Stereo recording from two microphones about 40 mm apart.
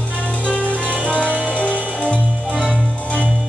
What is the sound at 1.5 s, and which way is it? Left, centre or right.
Music, left.